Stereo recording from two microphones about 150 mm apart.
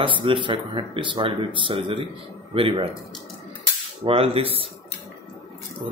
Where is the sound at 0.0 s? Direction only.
35° right (ahead or behind).